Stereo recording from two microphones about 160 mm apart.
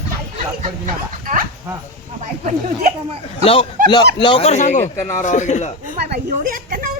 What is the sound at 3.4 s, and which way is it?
A man's voice, 35° left (ahead or behind).